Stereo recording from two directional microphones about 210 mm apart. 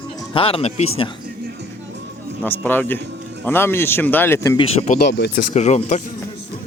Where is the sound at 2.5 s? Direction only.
10° left (ahead or behind).